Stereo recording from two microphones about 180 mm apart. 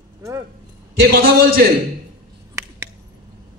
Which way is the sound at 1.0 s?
55° right (ahead or behind).